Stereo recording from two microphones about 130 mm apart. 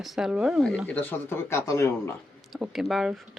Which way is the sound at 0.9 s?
15° left (ahead or behind).